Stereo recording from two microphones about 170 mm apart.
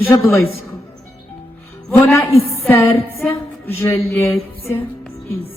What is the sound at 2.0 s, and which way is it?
A man's voice, 15° left (ahead or behind).